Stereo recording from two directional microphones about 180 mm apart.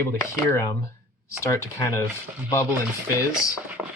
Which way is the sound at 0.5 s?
20° left (ahead or behind).